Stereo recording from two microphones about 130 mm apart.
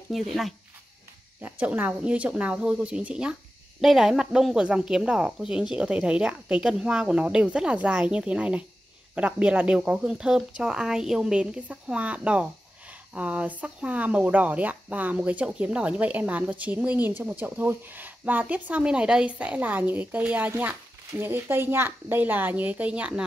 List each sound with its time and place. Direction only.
0.1 s speech: centre (ahead or behind)
1.4 s speech: 15° right (ahead or behind)